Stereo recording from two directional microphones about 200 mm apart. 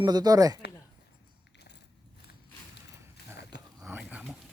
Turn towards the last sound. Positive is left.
turn(degrees=-5)  # may be behind; listen again after turning